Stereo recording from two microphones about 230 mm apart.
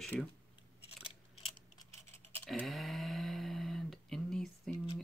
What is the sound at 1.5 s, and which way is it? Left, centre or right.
Coin, centre.